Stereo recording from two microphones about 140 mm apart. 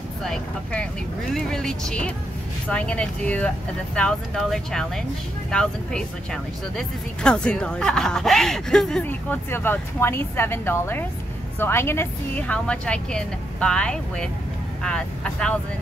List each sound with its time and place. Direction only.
0.2 s a woman's voice: 5° left (ahead or behind)
9.0 s a woman's voice: 15° left (ahead or behind)